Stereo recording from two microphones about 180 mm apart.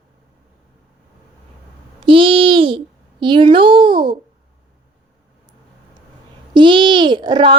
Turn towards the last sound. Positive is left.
turn(degrees=-25)  # may be behind; listen again after turning